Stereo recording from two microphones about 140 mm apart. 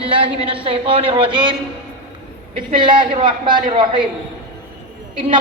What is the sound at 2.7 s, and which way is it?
A man's voice, 35° right (ahead or behind).